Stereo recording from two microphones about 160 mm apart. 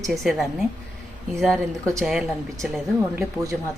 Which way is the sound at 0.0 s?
Centre (ahead or behind).